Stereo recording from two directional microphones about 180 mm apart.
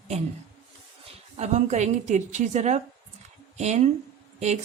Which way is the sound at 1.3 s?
40° right (ahead or behind).